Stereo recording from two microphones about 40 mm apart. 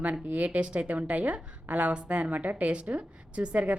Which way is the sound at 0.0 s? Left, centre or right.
Right.